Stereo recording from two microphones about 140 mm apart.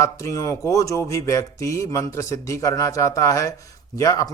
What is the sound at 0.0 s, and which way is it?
Speech, 20° left (ahead or behind).